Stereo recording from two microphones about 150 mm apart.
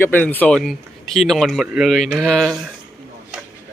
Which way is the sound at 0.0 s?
15° left (ahead or behind).